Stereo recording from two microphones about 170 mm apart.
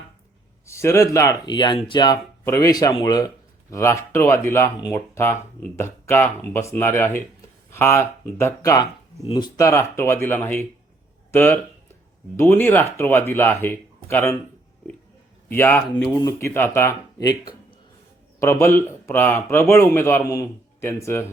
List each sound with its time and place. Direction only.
0.6 s speech: 15° left (ahead or behind)
15.4 s speech: 10° left (ahead or behind)
18.3 s speech: 15° left (ahead or behind)